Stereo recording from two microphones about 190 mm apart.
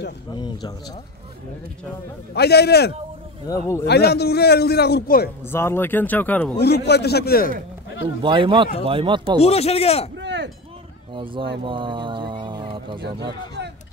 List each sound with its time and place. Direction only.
0.3 s speech: 20° left (ahead or behind)
2.3 s a man's voice: 60° left (ahead or behind)
3.4 s speech: 15° left (ahead or behind)
3.8 s a man's voice: 60° left (ahead or behind)
5.5 s speech: 10° left (ahead or behind)
6.6 s a man's voice: 60° left (ahead or behind)
8.2 s speech: 25° right (ahead or behind)
9.4 s speech: 35° left (ahead or behind)
10.1 s a sound: 65° right (ahead or behind)
11.1 s speech: 25° right (ahead or behind)